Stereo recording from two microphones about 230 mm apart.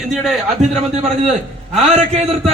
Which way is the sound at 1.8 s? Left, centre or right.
Right.